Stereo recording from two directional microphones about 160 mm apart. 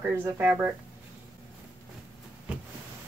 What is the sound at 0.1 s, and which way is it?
Speech, 10° right (ahead or behind).